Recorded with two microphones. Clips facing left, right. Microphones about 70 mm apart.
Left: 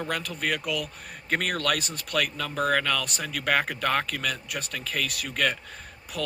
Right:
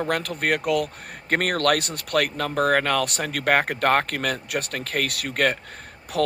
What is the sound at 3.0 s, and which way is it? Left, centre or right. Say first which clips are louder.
Speech: right 6 dB; right.